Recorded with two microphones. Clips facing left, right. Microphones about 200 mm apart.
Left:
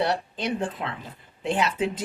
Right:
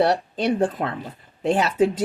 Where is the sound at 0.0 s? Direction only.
40° right (ahead or behind).